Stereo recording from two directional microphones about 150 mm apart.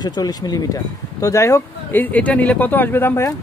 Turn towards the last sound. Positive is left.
turn(degrees=15)  # may be behind; listen again after turning